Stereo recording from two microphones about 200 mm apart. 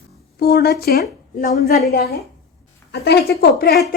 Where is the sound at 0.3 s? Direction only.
50° left (ahead or behind).